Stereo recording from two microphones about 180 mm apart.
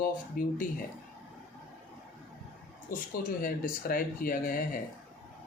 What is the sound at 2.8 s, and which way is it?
Speech, 50° left (ahead or behind).